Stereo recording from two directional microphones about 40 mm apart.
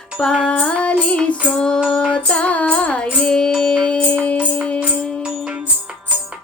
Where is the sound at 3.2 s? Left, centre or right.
Centre.